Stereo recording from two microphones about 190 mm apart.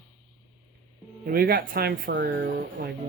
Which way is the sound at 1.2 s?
55° right (ahead or behind).